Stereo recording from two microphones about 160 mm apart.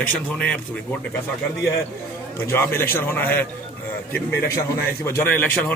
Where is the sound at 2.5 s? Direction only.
15° left (ahead or behind).